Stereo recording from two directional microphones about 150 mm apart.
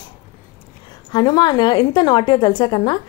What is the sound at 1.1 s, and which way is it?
A woman's voice, 30° left (ahead or behind).